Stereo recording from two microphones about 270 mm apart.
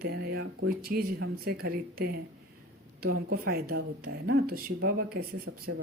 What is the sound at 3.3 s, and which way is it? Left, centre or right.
Speech, right.